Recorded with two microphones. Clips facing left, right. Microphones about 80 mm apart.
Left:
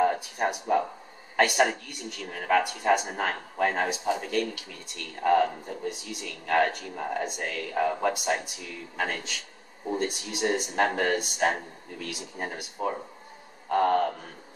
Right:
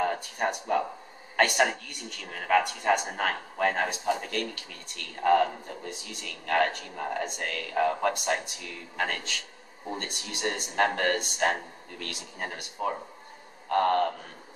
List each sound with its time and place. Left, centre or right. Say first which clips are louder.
0.0 s a man's voice: left 3 dB; centre